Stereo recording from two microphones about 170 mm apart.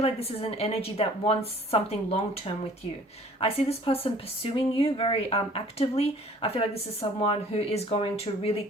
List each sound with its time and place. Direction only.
0.0 s speech: 35° left (ahead or behind)